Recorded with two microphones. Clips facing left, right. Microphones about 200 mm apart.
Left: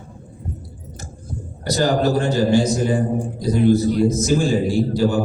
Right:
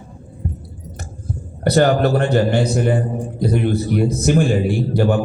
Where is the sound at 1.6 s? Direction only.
60° right (ahead or behind).